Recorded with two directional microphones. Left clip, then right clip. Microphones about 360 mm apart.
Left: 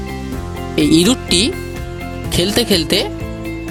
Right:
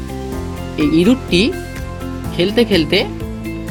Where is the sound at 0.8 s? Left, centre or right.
Left.